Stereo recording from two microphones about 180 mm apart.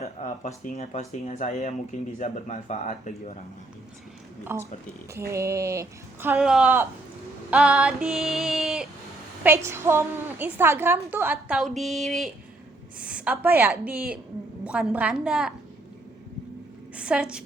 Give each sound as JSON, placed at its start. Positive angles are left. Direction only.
{"t": 0.0, "sound": "speech", "side_deg": 40}
{"t": 4.4, "sound": "a woman's voice", "side_deg": -15}
{"t": 7.5, "sound": "female singing", "side_deg": -5}
{"t": 9.4, "sound": "a woman's voice", "side_deg": -15}
{"t": 14.6, "sound": "female singing", "side_deg": -5}
{"t": 17.0, "sound": "female singing", "side_deg": -5}